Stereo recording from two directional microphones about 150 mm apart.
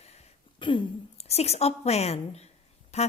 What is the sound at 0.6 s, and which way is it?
A woman's voice, 35° left (ahead or behind).